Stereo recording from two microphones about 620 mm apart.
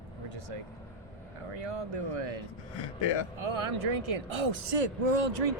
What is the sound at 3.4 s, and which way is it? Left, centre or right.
Speech, right.